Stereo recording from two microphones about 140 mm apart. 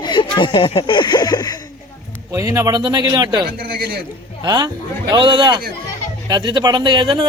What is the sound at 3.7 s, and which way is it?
Speech, 90° right.